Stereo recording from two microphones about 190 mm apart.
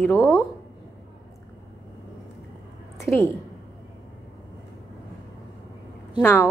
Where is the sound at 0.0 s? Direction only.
15° left (ahead or behind).